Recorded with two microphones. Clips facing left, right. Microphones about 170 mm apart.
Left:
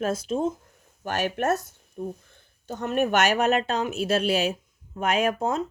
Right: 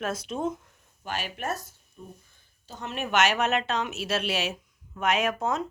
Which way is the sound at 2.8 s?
45° left (ahead or behind).